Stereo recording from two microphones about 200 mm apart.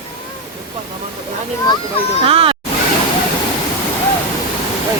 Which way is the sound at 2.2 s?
30° right (ahead or behind).